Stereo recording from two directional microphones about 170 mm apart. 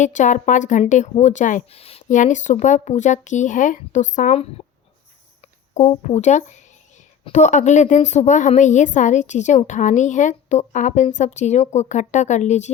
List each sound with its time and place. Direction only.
0.0 s a woman's voice: 45° left (ahead or behind)
5.4 s music: 40° left (ahead or behind)
6.1 s a woman's voice: 40° left (ahead or behind)